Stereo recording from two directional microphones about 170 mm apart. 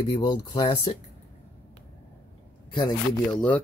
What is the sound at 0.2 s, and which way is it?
Speech, 30° left (ahead or behind).